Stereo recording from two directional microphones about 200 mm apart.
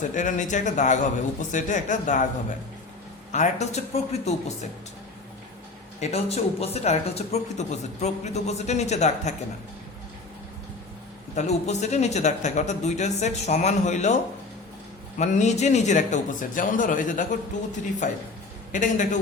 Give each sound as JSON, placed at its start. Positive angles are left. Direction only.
{"t": 0.1, "sound": "speech", "side_deg": 40}
{"t": 3.3, "sound": "speech", "side_deg": 35}
{"t": 6.0, "sound": "speech", "side_deg": 30}
{"t": 11.3, "sound": "speech", "side_deg": 35}
{"t": 15.2, "sound": "speech", "side_deg": 35}